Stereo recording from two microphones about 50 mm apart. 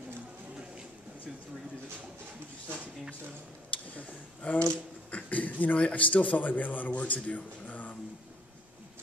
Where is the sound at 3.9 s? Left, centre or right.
Left.